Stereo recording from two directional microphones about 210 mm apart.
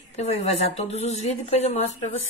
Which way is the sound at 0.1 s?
30° left (ahead or behind).